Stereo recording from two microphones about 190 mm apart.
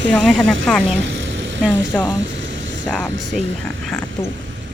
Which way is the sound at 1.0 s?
75° right (ahead or behind).